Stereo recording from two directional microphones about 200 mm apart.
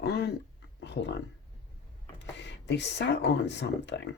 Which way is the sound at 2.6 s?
60° left (ahead or behind).